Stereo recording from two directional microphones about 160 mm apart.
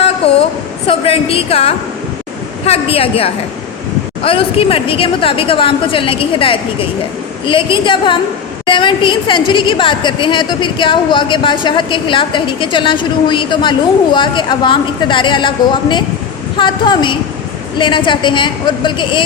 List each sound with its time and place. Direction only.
0.9 s a woman's voice: 35° left (ahead or behind)